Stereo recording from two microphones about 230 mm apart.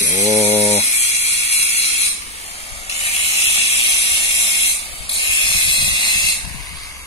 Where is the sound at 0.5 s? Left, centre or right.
Centre.